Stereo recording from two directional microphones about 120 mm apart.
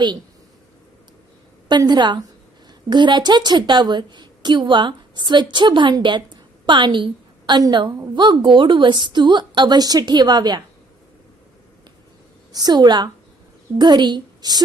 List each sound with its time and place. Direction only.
1.8 s a woman's voice: 35° right (ahead or behind)
12.5 s a woman's voice: 35° right (ahead or behind)